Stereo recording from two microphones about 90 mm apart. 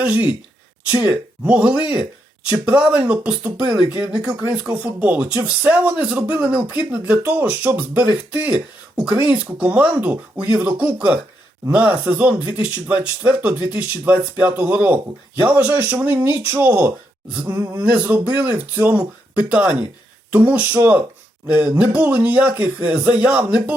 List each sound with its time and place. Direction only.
0.0 s speech: 15° right (ahead or behind)